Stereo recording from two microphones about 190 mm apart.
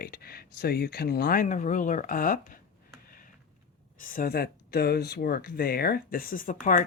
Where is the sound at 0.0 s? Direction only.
55° left (ahead or behind).